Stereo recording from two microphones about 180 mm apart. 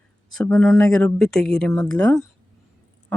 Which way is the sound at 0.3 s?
5° left (ahead or behind).